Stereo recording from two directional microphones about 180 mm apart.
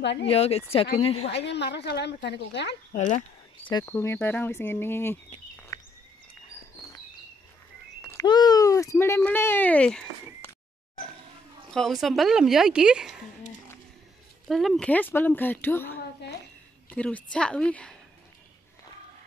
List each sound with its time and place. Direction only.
0.0 s a woman's voice: 75° left (ahead or behind)
0.3 s speech: 35° left (ahead or behind)
1.4 s a woman's voice: 70° left (ahead or behind)
2.9 s speech: 40° left (ahead or behind)
3.8 s speech: 15° left (ahead or behind)
5.7 s a sound: 20° left (ahead or behind)
8.0 s speech: 15° left (ahead or behind)
11.7 s a woman's voice: centre (ahead or behind)
14.5 s speech: centre (ahead or behind)